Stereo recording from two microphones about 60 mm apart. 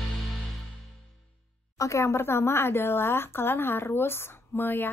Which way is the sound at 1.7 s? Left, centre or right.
Left.